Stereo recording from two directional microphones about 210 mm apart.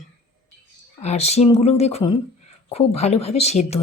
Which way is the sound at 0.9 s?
30° left (ahead or behind).